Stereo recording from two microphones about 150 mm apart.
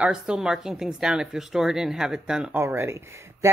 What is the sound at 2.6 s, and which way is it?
Speech, 15° right (ahead or behind).